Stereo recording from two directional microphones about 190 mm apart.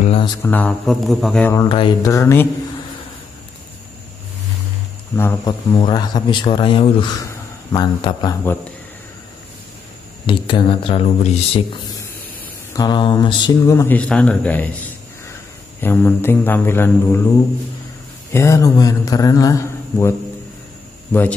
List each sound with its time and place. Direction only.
0.4 s speech: 10° left (ahead or behind)
1.5 s a man's voice: 20° left (ahead or behind)
5.1 s a man's voice: 15° left (ahead or behind)
10.2 s a man's voice: 25° left (ahead or behind)
18.3 s speech: 15° left (ahead or behind)